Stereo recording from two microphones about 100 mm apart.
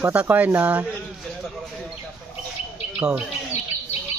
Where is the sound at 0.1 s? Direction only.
15° right (ahead or behind).